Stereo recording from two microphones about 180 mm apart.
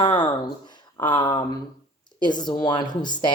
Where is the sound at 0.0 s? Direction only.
25° left (ahead or behind).